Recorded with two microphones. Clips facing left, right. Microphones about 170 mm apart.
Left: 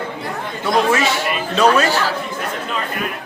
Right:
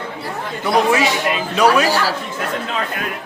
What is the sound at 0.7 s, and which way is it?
Speech, 15° right (ahead or behind).